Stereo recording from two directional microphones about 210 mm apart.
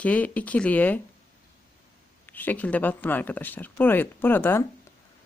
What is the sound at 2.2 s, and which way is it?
Speech, 10° left (ahead or behind).